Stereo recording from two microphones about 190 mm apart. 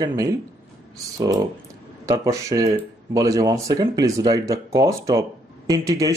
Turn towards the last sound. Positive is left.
turn(degrees=-15)  # may be behind; listen again after turning